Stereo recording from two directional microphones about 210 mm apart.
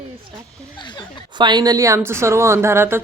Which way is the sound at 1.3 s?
20° right (ahead or behind).